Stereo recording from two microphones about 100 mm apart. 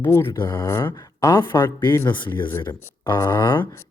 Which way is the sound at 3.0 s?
35° left (ahead or behind).